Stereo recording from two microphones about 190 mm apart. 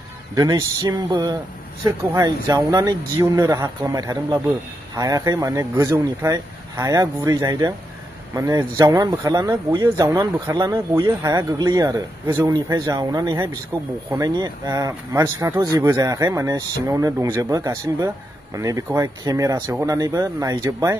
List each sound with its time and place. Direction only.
0.3 s speech: 20° right (ahead or behind)